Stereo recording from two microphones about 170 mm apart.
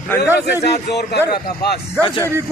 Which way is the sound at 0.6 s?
75° left (ahead or behind).